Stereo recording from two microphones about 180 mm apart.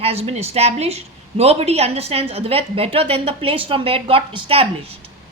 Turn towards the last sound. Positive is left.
turn(degrees=-30)  # may be behind; listen again after turning